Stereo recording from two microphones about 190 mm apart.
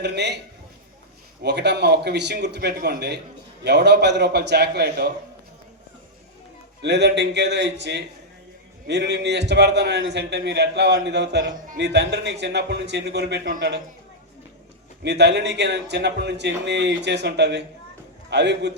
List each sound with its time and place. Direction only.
0.0 s a man's voice: 65° right (ahead or behind)
6.8 s a man's voice: 65° right (ahead or behind)
15.0 s a man's voice: 65° right (ahead or behind)